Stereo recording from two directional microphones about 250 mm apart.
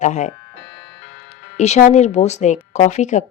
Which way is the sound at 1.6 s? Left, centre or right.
Left.